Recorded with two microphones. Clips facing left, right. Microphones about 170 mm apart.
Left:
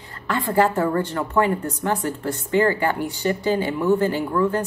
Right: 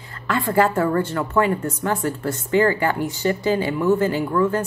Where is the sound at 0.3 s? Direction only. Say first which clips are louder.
Right 1 dB; 15° left (ahead or behind).